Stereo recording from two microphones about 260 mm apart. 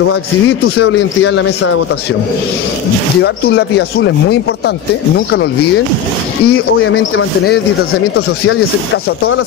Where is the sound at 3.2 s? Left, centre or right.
Left.